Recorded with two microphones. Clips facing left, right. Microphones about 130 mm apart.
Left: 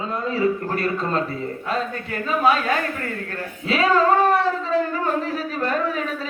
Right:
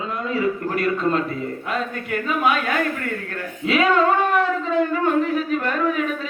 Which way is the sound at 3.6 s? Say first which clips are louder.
Even; 35° left (ahead or behind).